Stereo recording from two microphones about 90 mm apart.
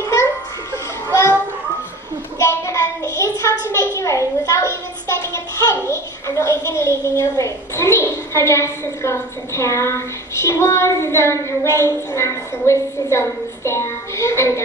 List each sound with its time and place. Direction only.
0.0 s music: 30° left (ahead or behind)
2.4 s child singing: 30° left (ahead or behind)
3.7 s a sound: 35° left (ahead or behind)
5.9 s a woman's voice: 30° left (ahead or behind)